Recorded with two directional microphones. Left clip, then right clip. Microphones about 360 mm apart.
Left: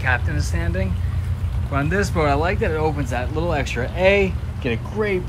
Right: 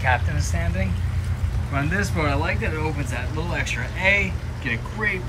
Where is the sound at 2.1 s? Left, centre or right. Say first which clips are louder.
Left 4 dB; centre.